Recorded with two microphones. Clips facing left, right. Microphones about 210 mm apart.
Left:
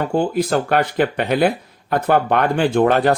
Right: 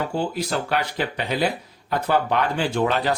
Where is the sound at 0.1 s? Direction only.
50° left (ahead or behind).